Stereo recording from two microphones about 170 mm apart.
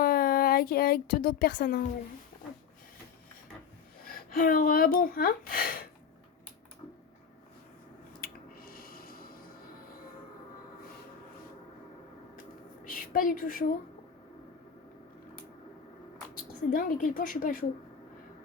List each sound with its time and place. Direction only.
0.0 s a woman's voice: 60° left (ahead or behind)
4.0 s speech: 60° left (ahead or behind)
8.2 s finger snapping: 60° left (ahead or behind)
12.9 s a woman's voice: 55° left (ahead or behind)
16.7 s speech: 55° left (ahead or behind)